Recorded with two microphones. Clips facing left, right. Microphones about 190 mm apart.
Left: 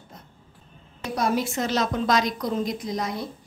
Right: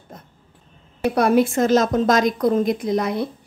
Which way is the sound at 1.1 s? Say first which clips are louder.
Right 7 dB; 60° right (ahead or behind).